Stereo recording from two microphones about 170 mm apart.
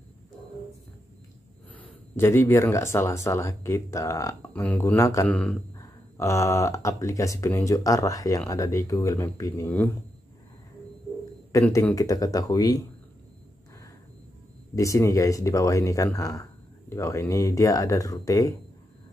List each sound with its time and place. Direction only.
1.7 s speech: 10° left (ahead or behind)
11.5 s speech: 20° left (ahead or behind)
14.8 s speech: 20° left (ahead or behind)